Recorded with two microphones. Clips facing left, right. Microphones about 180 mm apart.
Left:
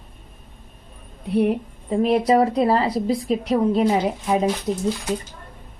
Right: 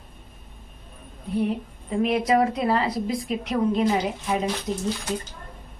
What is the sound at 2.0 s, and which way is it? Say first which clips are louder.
Speech: left 4 dB; 35° left (ahead or behind).